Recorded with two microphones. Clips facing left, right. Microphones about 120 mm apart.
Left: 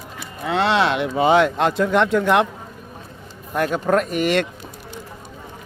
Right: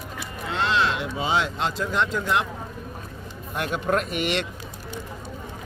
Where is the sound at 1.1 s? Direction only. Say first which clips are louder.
Left 9 dB; 60° left (ahead or behind).